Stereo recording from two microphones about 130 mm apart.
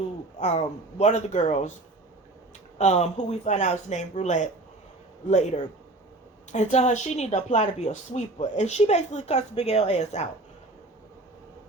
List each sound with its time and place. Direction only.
0.3 s a woman's voice: 60° left (ahead or behind)
2.7 s a woman's voice: 65° left (ahead or behind)